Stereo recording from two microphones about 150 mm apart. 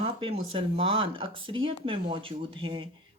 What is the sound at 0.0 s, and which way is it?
Speech, 40° right (ahead or behind).